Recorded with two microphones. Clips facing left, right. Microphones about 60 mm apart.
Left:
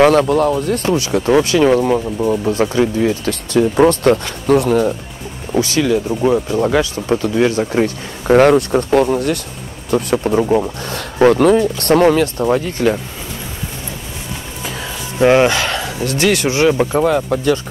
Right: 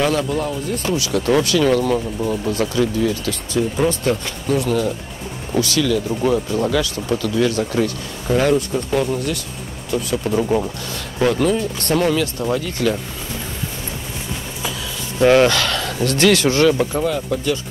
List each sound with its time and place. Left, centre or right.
0.0 s speech: left
0.8 s speech: left; by 2.4 s centre
2.4 s speech: left
3.6 s speech: left
3.9 s speech: left
6.0 s speech: centre
6.7 s speech: left
8.3 s speech: left
10.2 s speech: left
10.9 s speech: left
15.1 s speech: left
15.9 s speech: centre
16.9 s speech: left